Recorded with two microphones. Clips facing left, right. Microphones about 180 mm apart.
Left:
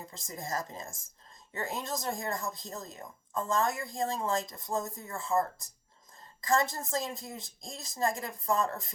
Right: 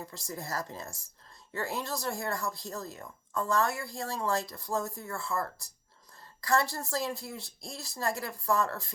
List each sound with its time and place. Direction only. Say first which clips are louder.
0.0 s speech: right 2 dB; 20° left (ahead or behind)